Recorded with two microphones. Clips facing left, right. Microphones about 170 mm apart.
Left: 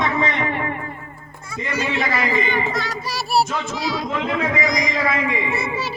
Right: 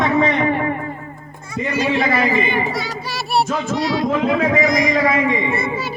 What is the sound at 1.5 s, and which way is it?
Speech, 15° right (ahead or behind).